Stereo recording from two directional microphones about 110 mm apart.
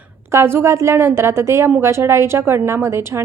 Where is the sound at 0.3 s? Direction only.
25° right (ahead or behind).